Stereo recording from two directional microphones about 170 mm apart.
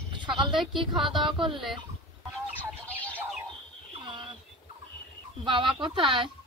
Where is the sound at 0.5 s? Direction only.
Centre (ahead or behind).